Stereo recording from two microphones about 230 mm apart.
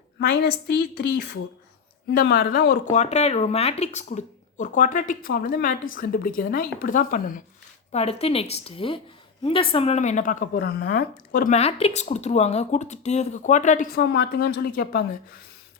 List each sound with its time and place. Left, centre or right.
0.2 s a woman's voice: left
2.9 s a woman's voice: left